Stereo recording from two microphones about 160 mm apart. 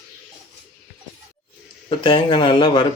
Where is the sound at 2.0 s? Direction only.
30° left (ahead or behind).